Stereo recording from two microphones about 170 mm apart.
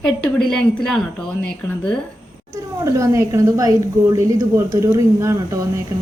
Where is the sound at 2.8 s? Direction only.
15° right (ahead or behind).